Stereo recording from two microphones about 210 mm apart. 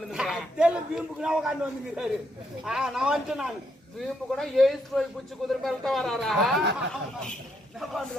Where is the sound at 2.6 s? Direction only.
5° right (ahead or behind).